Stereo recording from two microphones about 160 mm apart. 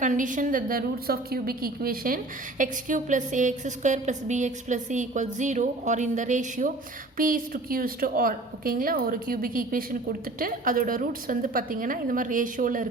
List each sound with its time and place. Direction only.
0.0 s a woman's voice: 50° right (ahead or behind)